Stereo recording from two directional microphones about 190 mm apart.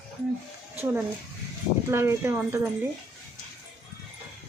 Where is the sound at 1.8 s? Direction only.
15° right (ahead or behind).